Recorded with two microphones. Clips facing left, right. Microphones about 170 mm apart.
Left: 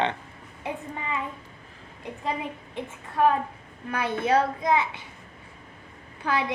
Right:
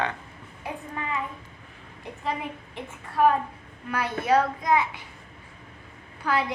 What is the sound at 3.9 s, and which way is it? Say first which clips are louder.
Speech: even; 20° left (ahead or behind).